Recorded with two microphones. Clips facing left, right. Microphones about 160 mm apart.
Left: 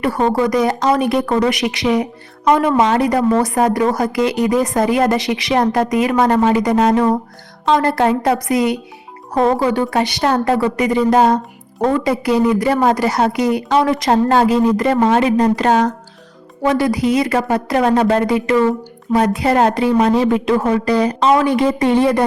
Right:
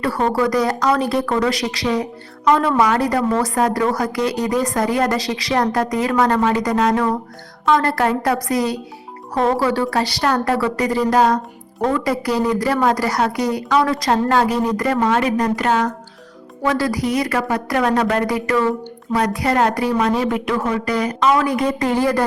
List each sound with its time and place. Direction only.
0.3 s speech: 20° left (ahead or behind)
16.6 s speech: 20° left (ahead or behind)